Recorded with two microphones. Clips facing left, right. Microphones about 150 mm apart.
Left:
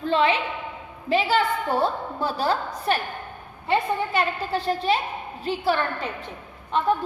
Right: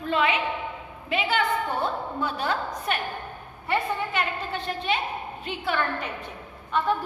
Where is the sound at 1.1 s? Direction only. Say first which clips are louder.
Left 3 dB; 35° left (ahead or behind).